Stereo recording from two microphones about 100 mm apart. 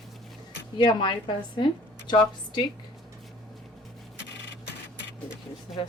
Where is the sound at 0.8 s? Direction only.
50° left (ahead or behind).